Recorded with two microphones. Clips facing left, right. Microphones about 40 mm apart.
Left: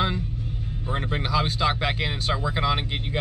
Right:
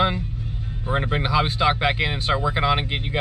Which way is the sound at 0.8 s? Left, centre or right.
Centre.